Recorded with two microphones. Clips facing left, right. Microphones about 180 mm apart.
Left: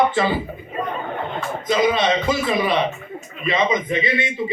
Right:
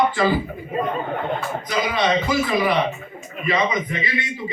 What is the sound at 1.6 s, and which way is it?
A man's voice, 20° left (ahead or behind).